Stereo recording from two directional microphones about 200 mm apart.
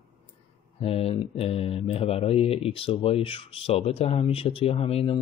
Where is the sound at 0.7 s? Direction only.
30° left (ahead or behind).